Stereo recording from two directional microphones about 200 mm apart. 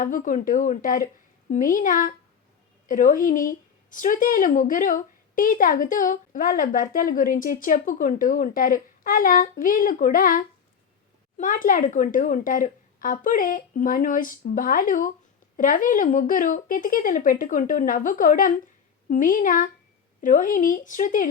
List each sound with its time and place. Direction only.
0.0 s a woman's voice: 40° left (ahead or behind)